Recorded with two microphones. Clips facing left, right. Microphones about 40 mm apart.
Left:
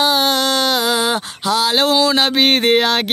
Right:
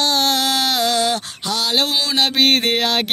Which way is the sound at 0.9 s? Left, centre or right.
Centre.